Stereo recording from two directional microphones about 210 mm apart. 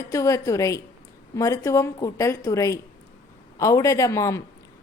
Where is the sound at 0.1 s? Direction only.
15° left (ahead or behind).